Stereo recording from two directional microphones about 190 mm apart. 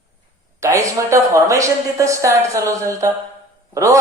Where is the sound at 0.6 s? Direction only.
15° right (ahead or behind).